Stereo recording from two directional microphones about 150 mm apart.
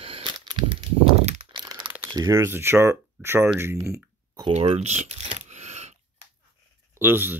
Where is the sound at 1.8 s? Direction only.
10° right (ahead or behind).